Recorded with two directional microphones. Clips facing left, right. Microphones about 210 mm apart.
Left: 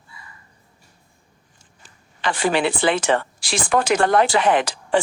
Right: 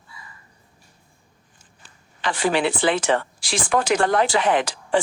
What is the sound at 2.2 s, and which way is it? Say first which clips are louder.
Speech: left 1 dB; 60° left (ahead or behind).